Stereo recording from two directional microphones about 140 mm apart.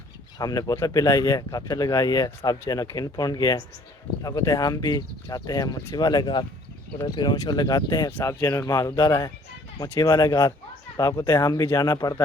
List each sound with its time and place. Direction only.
0.3 s speech: 25° left (ahead or behind)